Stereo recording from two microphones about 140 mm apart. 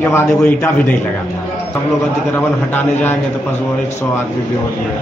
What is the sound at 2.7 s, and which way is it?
Speech, 15° left (ahead or behind).